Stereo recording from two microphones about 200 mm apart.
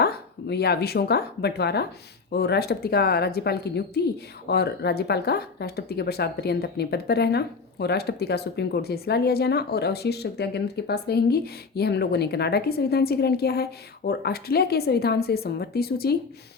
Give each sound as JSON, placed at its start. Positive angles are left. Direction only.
{"t": 0.0, "sound": "speech", "side_deg": 55}